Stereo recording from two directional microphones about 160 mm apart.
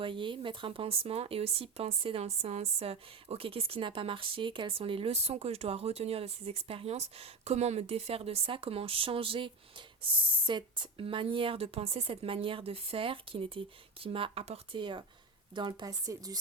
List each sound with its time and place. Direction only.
0.0 s speech: 30° right (ahead or behind)